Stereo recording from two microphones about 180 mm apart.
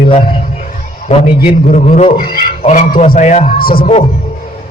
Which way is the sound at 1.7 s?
40° left (ahead or behind).